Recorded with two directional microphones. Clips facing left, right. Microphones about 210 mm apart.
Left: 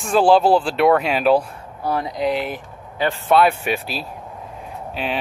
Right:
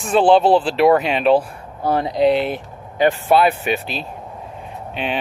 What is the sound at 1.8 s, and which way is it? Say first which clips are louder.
Speech: right 5 dB; 25° right (ahead or behind).